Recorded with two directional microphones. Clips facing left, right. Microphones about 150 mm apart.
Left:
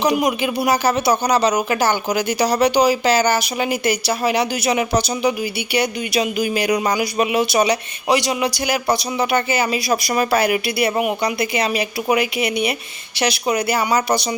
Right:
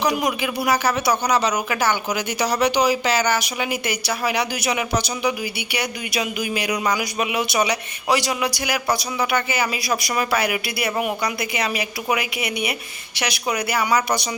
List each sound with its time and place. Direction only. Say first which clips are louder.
0.0 s speech: left 4 dB; 25° left (ahead or behind)
8.0 s a man's voice: left 3 dB; 20° left (ahead or behind)